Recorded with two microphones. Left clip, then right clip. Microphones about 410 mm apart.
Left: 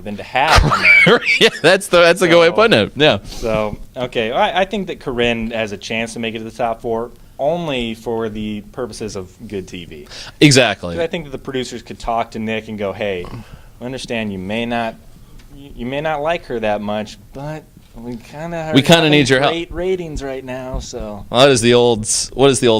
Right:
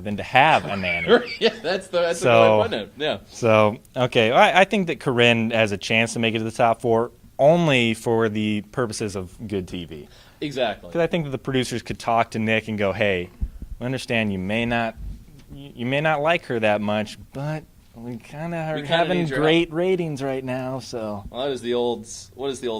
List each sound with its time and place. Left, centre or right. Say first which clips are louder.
0.0 s speech: even; right
0.6 s speech: left 15 dB; left
2.6 s speech: left 10 dB; left
3.4 s speech: right 4 dB; right
10.4 s speech: left 13 dB; left
10.9 s speech: left 1 dB; right
18.7 s speech: left 10 dB; left
19.5 s speech: left 1 dB; right
21.2 s speech: left 18 dB; left